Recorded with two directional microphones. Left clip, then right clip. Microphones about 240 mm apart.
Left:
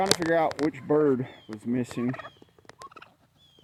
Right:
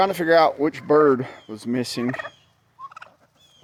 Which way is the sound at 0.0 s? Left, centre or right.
Centre.